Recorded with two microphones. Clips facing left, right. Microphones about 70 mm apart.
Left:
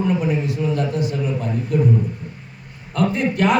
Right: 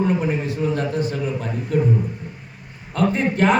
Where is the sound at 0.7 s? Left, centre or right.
Right.